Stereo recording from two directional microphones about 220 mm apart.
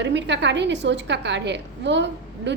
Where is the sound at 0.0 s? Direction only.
55° right (ahead or behind).